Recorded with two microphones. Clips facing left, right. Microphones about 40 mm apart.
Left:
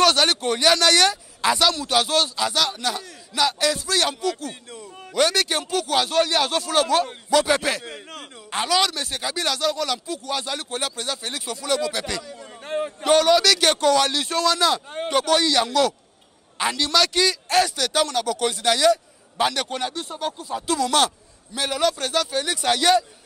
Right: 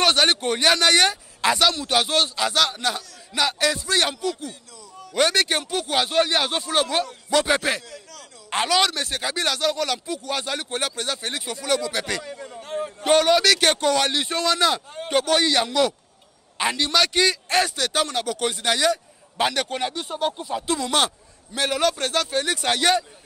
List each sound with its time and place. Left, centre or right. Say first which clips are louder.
0.0 s speech: left 1 dB; centre
7.8 s a sound: left 5 dB; left
8.5 s speech: right 1 dB; centre
12.0 s speech: right 2 dB; right
12.4 s a sound: left 5 dB; left
13.1 s speech: even; centre
20.1 s speech: right 3 dB; right
20.5 s speech: left 4 dB; centre
21.9 s speech: even; right